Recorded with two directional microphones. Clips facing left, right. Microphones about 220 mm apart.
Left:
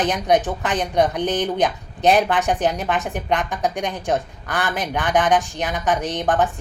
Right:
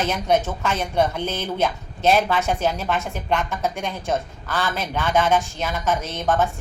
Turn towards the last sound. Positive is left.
turn(degrees=15)  # may be behind; listen again after turning